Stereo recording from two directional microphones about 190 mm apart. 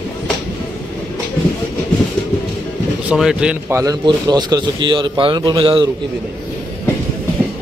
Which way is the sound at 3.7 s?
20° right (ahead or behind).